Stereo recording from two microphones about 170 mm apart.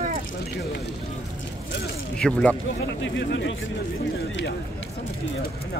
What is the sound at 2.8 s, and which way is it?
Speech, 90° left.